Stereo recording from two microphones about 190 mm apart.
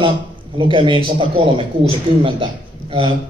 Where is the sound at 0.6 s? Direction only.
25° right (ahead or behind).